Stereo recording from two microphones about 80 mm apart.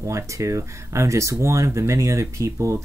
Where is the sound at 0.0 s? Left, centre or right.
Right.